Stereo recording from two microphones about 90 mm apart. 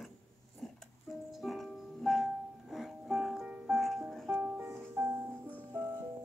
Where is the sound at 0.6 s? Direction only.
Centre (ahead or behind).